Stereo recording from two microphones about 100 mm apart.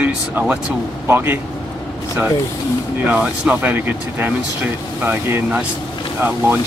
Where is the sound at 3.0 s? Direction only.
10° right (ahead or behind).